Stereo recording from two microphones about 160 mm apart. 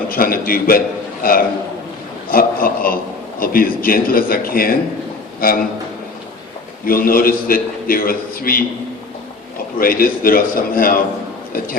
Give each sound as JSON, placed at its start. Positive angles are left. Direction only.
{"t": 0.1, "sound": "a man's voice", "side_deg": 65}
{"t": 6.8, "sound": "a man's voice", "side_deg": 65}
{"t": 9.7, "sound": "a man's voice", "side_deg": 65}